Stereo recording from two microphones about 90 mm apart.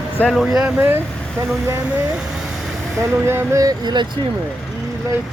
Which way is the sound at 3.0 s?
30° right (ahead or behind).